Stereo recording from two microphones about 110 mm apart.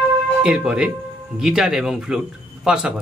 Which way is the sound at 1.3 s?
5° right (ahead or behind).